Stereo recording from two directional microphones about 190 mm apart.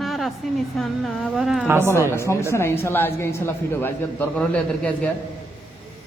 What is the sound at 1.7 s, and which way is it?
Speech, 15° right (ahead or behind).